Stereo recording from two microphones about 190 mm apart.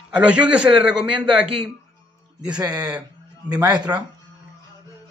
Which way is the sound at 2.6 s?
20° right (ahead or behind).